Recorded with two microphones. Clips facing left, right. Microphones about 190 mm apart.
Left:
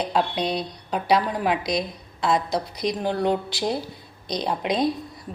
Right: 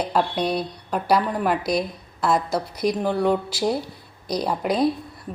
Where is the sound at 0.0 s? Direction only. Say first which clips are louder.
Right 1 dB; 5° right (ahead or behind).